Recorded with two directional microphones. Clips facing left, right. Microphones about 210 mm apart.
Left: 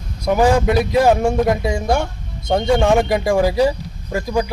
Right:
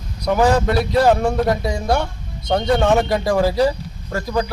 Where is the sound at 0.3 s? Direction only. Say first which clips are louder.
Left 1 dB; 10° left (ahead or behind).